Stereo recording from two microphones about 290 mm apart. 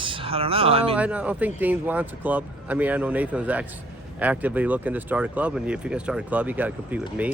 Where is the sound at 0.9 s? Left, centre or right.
Centre.